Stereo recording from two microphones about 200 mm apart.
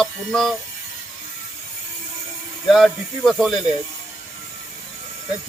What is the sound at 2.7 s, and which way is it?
Speech, centre (ahead or behind).